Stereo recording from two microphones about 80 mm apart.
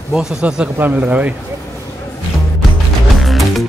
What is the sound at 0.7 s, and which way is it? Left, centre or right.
Speech, right.